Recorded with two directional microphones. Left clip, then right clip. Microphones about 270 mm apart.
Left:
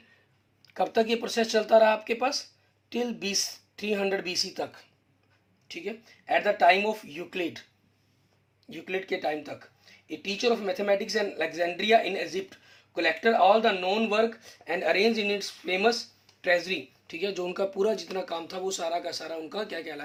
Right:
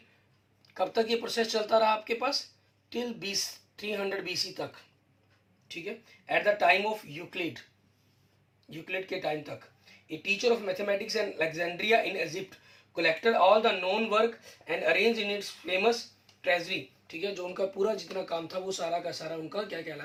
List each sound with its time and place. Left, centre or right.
0.7 s speech: left
6.4 s speech: left
8.7 s speech: left